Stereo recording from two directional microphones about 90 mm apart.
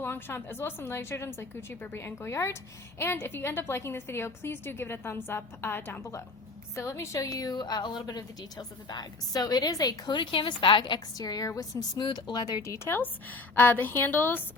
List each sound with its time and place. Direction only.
0.0 s a woman's voice: 25° left (ahead or behind); by 10.0 s 45° left (ahead or behind)
10.1 s a woman's voice: 65° left (ahead or behind); by 14.4 s 25° left (ahead or behind)